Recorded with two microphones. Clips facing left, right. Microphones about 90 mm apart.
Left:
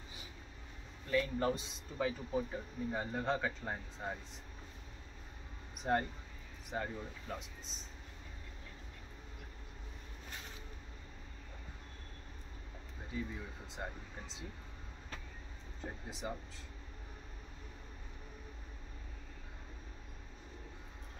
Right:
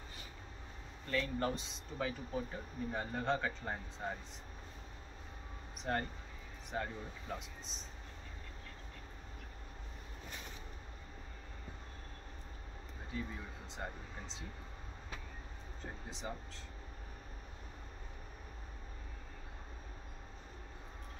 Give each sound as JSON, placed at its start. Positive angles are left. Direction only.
{"t": 1.0, "sound": "speech", "side_deg": 5}
{"t": 5.9, "sound": "speech", "side_deg": 15}
{"t": 6.7, "sound": "speech", "side_deg": 0}
{"t": 13.1, "sound": "speech", "side_deg": 5}
{"t": 15.8, "sound": "speech", "side_deg": 5}